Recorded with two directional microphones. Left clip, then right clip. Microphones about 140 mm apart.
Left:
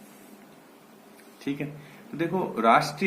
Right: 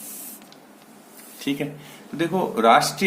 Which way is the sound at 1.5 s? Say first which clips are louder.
Right 6 dB; 35° right (ahead or behind).